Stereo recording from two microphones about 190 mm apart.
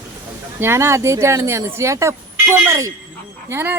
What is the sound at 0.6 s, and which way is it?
Speech, 15° right (ahead or behind).